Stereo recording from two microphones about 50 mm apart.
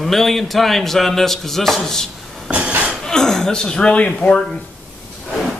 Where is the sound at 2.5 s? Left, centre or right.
Right.